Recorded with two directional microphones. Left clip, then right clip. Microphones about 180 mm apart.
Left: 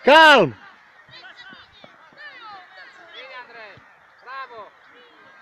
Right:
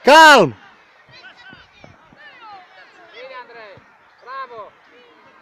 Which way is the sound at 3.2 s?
55° left (ahead or behind).